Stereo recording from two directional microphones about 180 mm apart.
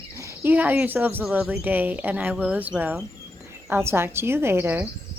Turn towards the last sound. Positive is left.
turn(degrees=-10)  # may be behind; listen again after turning